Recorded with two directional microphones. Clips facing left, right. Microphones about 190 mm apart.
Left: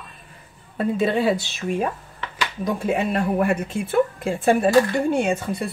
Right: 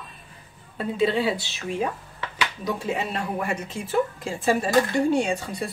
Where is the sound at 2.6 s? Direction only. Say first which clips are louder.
Left 6 dB; 55° left (ahead or behind).